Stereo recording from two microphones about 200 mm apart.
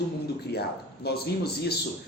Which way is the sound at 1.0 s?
50° left (ahead or behind).